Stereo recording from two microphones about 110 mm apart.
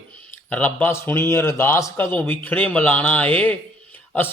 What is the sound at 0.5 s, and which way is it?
Speech, 15° left (ahead or behind).